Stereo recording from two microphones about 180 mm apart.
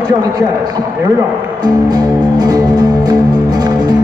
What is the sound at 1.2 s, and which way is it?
Music, 20° right (ahead or behind).